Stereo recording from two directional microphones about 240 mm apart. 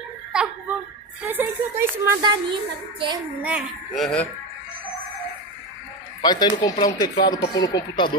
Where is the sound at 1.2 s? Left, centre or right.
Centre.